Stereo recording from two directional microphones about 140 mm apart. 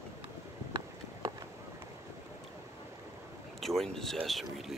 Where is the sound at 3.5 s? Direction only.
Centre (ahead or behind).